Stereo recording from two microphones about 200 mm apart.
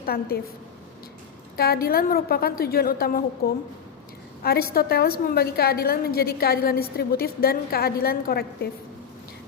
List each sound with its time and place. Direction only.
0.0 s a woman's voice: 50° left (ahead or behind)
1.5 s a woman's voice: 50° left (ahead or behind)